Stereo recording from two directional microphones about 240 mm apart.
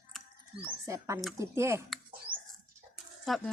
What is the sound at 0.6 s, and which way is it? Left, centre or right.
Speech, centre.